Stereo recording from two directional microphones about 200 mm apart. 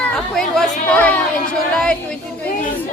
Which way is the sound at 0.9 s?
5° left (ahead or behind).